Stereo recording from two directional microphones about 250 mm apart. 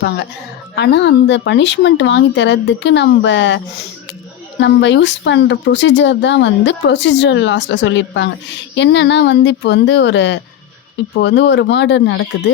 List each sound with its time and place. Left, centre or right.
0.8 s speech: left